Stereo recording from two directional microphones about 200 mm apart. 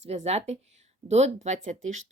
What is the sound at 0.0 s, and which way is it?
A woman's voice, 35° right (ahead or behind).